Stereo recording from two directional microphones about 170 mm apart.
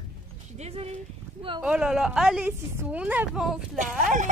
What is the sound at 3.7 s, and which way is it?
Speech, 50° right (ahead or behind).